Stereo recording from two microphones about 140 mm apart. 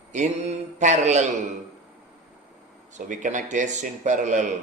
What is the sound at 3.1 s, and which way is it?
A man's voice, 65° right (ahead or behind).